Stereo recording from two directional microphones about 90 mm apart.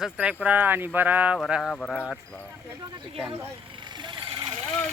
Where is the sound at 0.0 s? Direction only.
10° right (ahead or behind).